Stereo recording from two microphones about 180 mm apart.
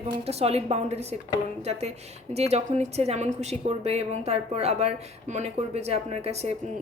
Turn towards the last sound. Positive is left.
turn(degrees=-35)  # may be behind; listen again after turning